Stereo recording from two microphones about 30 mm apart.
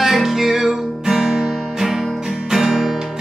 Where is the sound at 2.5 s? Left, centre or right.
Centre.